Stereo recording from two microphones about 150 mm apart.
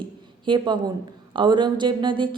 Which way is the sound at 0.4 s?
30° right (ahead or behind).